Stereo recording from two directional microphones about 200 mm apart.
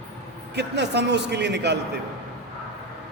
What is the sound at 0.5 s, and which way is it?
A man's voice, 55° right (ahead or behind).